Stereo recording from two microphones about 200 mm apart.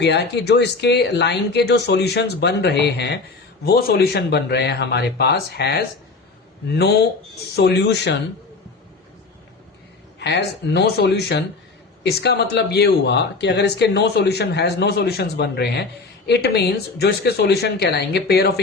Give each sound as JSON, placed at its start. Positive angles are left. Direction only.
{"t": 0.0, "sound": "speech", "side_deg": 55}
{"t": 10.2, "sound": "speech", "side_deg": 55}